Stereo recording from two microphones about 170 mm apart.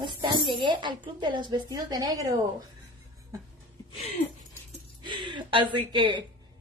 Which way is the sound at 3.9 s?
40° left (ahead or behind).